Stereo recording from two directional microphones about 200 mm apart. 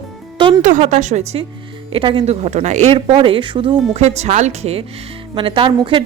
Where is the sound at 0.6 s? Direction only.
40° right (ahead or behind).